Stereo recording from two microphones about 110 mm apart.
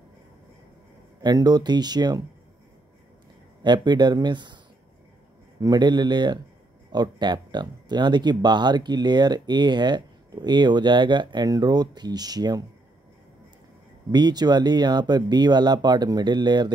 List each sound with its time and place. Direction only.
1.2 s speech: 40° right (ahead or behind)
3.6 s speech: 40° right (ahead or behind)
5.6 s speech: 40° right (ahead or behind)
14.1 s speech: 40° right (ahead or behind)